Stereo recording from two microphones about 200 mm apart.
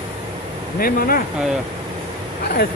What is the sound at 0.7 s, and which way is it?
Speech, 45° left (ahead or behind).